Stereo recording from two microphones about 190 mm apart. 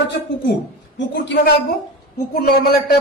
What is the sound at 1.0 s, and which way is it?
Speech, 65° left (ahead or behind).